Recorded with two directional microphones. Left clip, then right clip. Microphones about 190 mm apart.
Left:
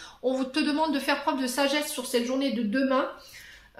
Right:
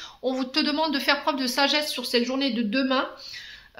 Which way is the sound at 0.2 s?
25° right (ahead or behind).